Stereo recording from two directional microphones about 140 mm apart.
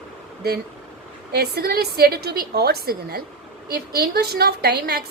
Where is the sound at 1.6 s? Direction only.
90° right.